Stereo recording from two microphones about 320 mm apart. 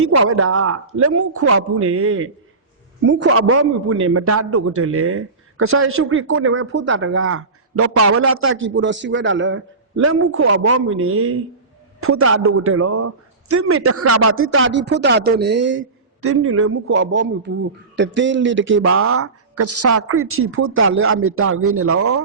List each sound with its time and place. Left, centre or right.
0.0 s a man's voice: right
9.9 s speech: right